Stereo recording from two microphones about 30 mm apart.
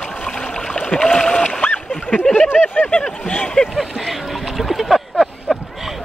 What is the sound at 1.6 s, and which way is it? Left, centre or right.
Splash, left.